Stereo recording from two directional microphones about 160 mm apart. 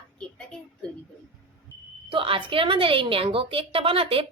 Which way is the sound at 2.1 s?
35° right (ahead or behind).